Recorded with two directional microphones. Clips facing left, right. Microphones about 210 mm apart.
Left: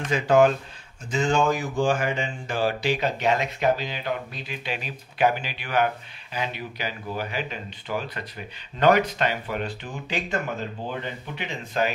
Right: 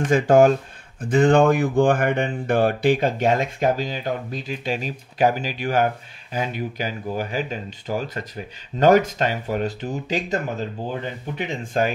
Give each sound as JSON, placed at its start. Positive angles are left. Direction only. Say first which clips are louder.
{"t": 0.0, "sound": "speech", "louder": "right 4 dB", "side_deg": -50}
{"t": 1.0, "sound": "speech", "louder": "right 7 dB", "side_deg": -55}